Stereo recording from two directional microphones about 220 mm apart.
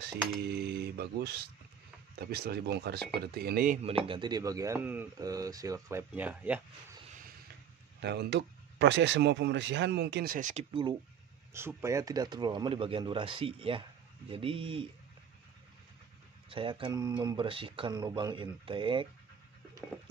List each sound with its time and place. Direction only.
0.0 s speech: 50° right (ahead or behind)
3.8 s speech: 25° right (ahead or behind); by 6.6 s 5° right (ahead or behind)
8.0 s speech: 50° right (ahead or behind); by 14.9 s 25° right (ahead or behind)
16.4 s speech: 25° right (ahead or behind)